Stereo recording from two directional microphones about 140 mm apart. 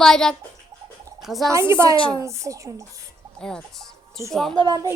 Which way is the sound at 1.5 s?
20° right (ahead or behind).